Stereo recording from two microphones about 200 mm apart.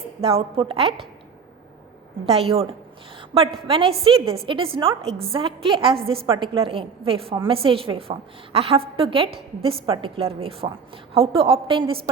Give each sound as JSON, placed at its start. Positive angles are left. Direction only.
{"t": 0.2, "sound": "a woman's voice", "side_deg": -30}
{"t": 2.2, "sound": "a woman's voice", "side_deg": -30}